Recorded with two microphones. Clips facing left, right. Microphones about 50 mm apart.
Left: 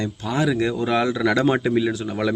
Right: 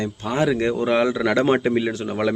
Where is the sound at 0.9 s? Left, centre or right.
Right.